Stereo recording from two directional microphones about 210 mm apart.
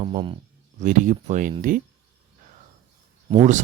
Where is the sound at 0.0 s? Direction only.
25° right (ahead or behind).